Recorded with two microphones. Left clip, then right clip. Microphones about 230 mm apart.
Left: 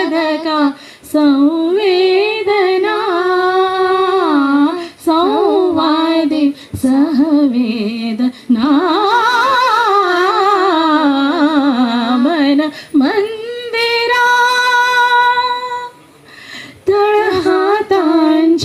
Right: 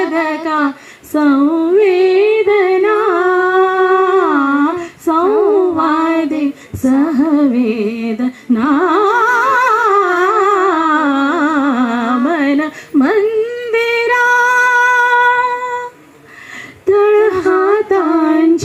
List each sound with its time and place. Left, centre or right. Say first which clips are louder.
0.0 s a sound: left 1 dB; left
1.1 s female singing: even; left
3.8 s humming: right 2 dB; left
6.0 s child singing: left 1 dB; left
6.8 s female singing: even; left
13.9 s music: left 1 dB; left
16.8 s female singing: right 2 dB; left